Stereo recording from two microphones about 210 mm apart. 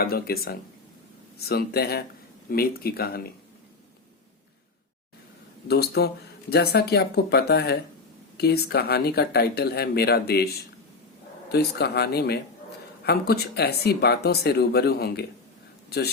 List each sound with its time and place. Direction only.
0.0 s speech: 45° left (ahead or behind)
5.6 s speech: 50° left (ahead or behind)
11.5 s speech: 50° left (ahead or behind)